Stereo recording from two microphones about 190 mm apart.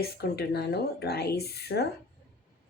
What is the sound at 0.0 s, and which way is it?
Speech, 55° left (ahead or behind).